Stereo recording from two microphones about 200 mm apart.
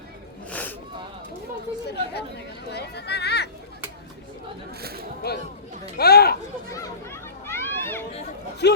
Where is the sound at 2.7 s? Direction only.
55° left (ahead or behind).